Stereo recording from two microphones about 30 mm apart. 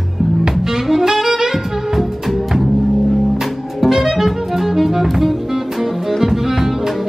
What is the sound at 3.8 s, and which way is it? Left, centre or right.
Music, centre.